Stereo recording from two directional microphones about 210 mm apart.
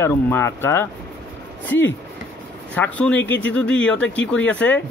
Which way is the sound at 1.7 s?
60° left (ahead or behind).